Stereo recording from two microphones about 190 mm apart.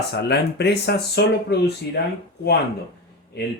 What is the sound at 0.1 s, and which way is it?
Speech, 60° left (ahead or behind).